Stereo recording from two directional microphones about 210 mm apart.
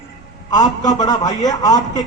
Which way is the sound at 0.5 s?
20° left (ahead or behind).